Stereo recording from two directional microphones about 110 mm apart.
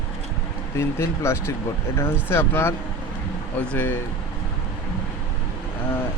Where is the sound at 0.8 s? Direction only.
25° left (ahead or behind).